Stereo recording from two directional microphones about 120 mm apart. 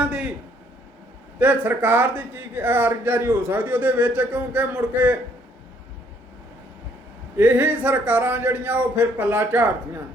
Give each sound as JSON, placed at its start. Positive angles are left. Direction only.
{"t": 0.0, "sound": "a sound", "side_deg": -10}
{"t": 1.4, "sound": "a man's voice", "side_deg": -15}
{"t": 7.3, "sound": "a man's voice", "side_deg": -15}